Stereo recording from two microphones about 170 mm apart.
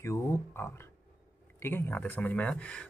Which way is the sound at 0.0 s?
15° left (ahead or behind).